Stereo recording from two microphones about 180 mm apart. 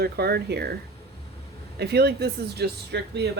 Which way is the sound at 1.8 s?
65° right (ahead or behind).